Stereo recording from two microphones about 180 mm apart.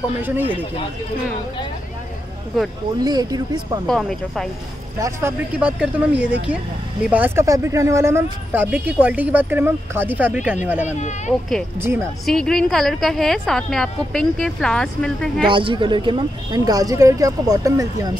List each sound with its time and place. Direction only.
3.0 s speech: 20° right (ahead or behind)
3.8 s a woman's voice: 5° left (ahead or behind)
5.0 s speech: 10° right (ahead or behind)
11.0 s speech: 40° left (ahead or behind)
12.3 s a woman's voice: 5° left (ahead or behind)
15.4 s speech: 30° right (ahead or behind)